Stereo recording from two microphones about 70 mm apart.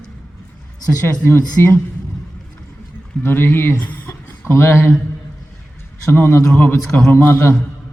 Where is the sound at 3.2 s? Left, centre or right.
Left.